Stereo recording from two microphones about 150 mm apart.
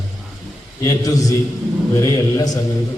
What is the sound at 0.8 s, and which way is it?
A man's voice, 20° left (ahead or behind).